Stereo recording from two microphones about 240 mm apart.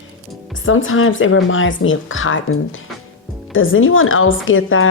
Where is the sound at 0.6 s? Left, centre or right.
Left.